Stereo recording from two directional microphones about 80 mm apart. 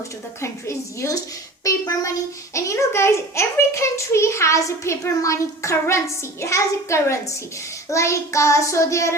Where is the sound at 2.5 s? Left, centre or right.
Left.